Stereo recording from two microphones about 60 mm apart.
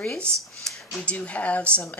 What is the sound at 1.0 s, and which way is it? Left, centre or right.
Speech, left.